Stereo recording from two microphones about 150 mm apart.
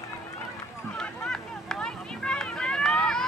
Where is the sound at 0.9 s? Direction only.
5° left (ahead or behind).